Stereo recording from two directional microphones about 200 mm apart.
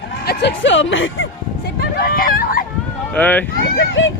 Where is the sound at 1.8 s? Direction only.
50° left (ahead or behind).